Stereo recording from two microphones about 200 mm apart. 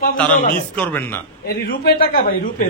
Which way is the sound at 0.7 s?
10° left (ahead or behind).